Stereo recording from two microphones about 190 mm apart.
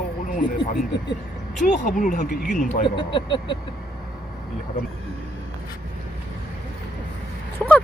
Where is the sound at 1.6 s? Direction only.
40° left (ahead or behind).